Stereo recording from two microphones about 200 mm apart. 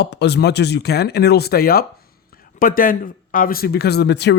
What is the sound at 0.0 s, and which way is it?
Speech, 55° left (ahead or behind).